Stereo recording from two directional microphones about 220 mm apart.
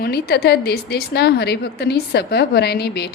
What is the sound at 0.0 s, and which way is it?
Speech, 45° left (ahead or behind).